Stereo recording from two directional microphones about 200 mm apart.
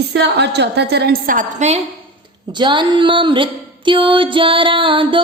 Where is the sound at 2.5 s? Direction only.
25° right (ahead or behind).